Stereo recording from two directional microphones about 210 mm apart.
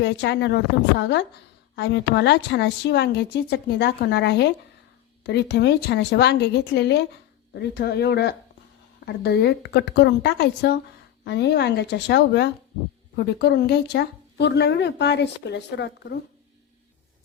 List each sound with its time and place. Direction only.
0.0 s speech: 55° left (ahead or behind)